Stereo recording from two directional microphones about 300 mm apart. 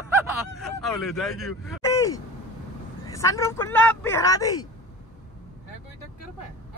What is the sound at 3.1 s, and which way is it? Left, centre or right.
Speech, centre.